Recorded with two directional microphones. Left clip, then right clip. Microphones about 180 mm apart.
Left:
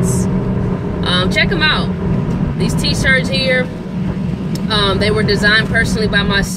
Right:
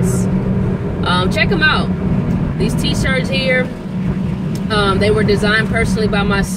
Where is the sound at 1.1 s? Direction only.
5° left (ahead or behind).